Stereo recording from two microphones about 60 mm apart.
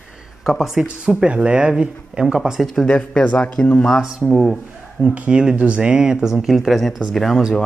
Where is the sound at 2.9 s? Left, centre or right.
Centre.